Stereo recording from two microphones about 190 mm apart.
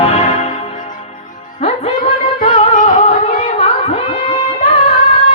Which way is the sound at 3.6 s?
35° left (ahead or behind).